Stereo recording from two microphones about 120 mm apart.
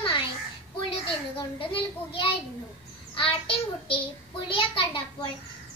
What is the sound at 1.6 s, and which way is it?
A child's voice, 45° left (ahead or behind).